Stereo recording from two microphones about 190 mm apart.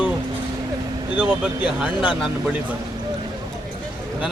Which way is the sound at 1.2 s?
5° right (ahead or behind).